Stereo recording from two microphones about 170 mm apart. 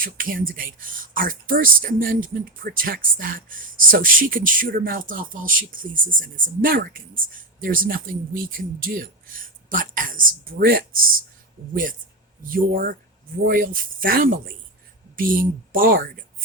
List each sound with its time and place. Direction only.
0.0 s speech: 55° right (ahead or behind)